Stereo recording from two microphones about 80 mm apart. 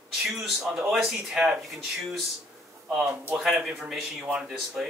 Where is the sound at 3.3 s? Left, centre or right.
Centre.